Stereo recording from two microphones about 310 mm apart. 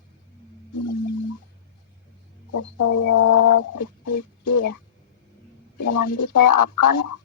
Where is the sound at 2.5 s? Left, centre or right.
Left.